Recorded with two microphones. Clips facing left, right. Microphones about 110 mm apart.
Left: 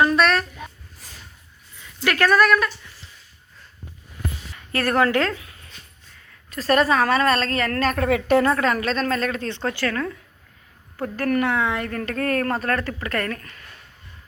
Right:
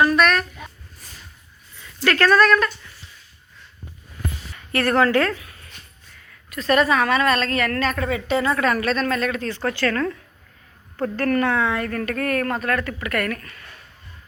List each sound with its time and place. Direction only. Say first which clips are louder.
0.0 s a sound: right 1 dB; 25° left (ahead or behind)
2.0 s speech: right 1 dB; 15° left (ahead or behind)
4.8 s a woman's voice: right 2 dB; 15° left (ahead or behind)
6.5 s a woman's voice: even; 35° left (ahead or behind); by 8.5 s 55° left (ahead or behind)
8.5 s a woman's voice: right 1 dB; 25° left (ahead or behind)